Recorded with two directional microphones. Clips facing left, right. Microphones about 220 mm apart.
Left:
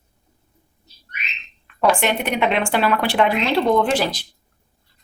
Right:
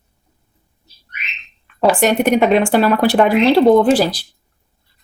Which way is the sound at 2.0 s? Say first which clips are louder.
Right 7 dB; 40° right (ahead or behind).